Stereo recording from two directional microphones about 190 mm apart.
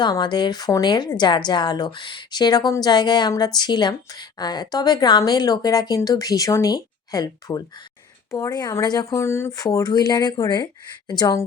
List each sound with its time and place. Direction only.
0.0 s a woman's voice: 25° left (ahead or behind)